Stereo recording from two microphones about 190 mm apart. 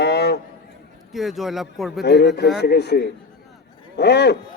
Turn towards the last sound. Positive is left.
turn(degrees=60)  # may be behind; listen again after turning